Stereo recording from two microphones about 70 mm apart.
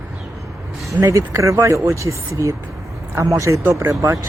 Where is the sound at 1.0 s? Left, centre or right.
Right.